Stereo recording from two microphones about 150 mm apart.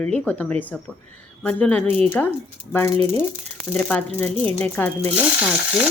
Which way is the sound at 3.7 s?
10° left (ahead or behind).